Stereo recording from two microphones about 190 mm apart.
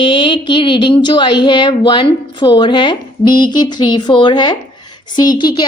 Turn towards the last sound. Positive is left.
turn(degrees=25)  # may be behind; listen again after turning